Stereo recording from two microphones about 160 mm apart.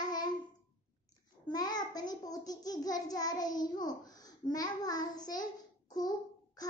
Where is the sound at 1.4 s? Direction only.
25° left (ahead or behind).